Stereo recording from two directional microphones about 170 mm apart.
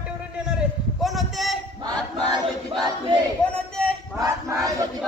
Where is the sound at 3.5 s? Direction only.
5° left (ahead or behind).